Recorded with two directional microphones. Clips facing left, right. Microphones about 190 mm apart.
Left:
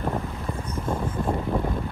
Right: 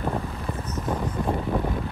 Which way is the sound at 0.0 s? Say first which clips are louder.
Even; centre (ahead or behind).